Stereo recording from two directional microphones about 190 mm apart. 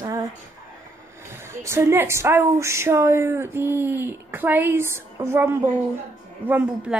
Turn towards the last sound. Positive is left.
turn(degrees=-10)  # may be behind; listen again after turning